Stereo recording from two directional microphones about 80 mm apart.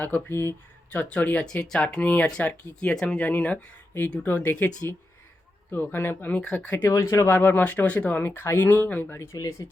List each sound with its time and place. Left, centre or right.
0.0 s speech: left
6.8 s speech: left
7.3 s speech: left
8.2 s speech: left
9.1 s speech: left